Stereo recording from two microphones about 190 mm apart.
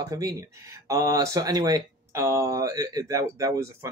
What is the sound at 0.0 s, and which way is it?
Speech, 20° right (ahead or behind).